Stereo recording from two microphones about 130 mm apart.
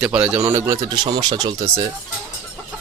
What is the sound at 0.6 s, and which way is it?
Speech, 35° right (ahead or behind).